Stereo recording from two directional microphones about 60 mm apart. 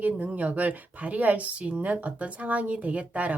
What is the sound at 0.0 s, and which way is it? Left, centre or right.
A woman's voice, right.